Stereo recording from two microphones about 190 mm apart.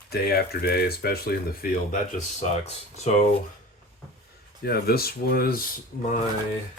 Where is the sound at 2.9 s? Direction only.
35° left (ahead or behind).